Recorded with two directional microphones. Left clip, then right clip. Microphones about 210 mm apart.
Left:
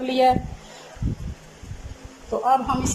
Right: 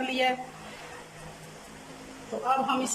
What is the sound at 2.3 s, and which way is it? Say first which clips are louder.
Speech: left 9 dB; 20° left (ahead or behind).